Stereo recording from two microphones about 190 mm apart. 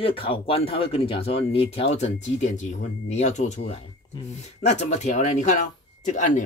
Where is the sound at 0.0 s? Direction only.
30° left (ahead or behind).